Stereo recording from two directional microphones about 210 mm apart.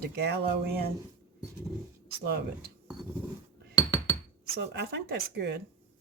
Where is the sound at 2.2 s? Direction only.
50° right (ahead or behind).